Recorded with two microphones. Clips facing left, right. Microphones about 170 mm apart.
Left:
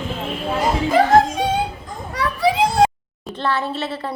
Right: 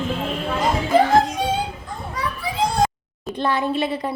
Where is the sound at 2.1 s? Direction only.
80° left.